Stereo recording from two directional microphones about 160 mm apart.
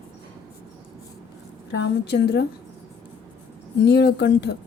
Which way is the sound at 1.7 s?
90° left.